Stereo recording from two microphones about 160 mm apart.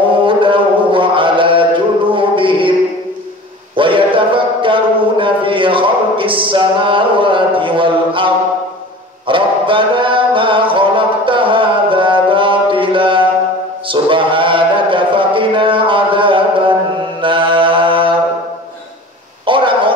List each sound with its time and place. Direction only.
0.1 s chant: 30° right (ahead or behind)
2.1 s music: 30° right (ahead or behind)
3.7 s a sound: 30° right (ahead or behind)
9.3 s music: 30° right (ahead or behind)
17.2 s mantra: 30° right (ahead or behind)
19.4 s a sound: 30° right (ahead or behind)